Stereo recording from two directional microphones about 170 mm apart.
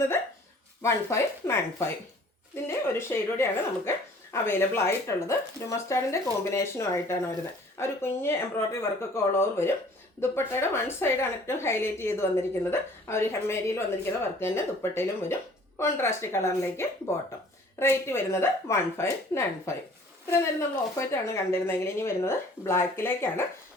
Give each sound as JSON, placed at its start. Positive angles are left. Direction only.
{"t": 0.8, "sound": "a woman's voice", "side_deg": 15}